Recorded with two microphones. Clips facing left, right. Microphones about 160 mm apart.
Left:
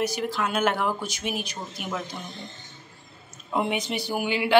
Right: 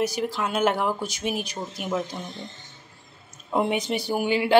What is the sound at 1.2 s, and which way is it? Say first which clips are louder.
Speech: right 3 dB; 40° right (ahead or behind).